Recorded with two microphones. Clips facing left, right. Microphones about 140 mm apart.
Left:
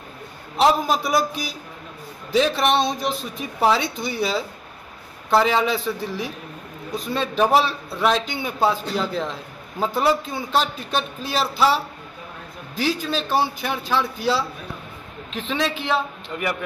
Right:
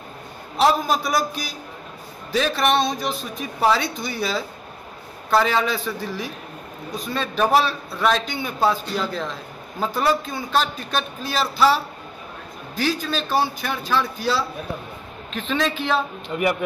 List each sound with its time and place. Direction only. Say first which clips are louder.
0.6 s speech: left 1 dB; 20° left (ahead or behind)
7.5 s speech: even; 20° left (ahead or behind)
16.3 s speech: right 5 dB; 20° right (ahead or behind)